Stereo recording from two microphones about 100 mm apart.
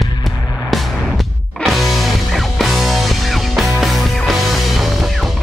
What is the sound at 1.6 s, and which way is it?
Music, centre (ahead or behind).